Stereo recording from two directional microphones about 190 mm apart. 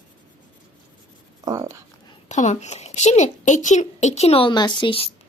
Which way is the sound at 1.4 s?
20° right (ahead or behind).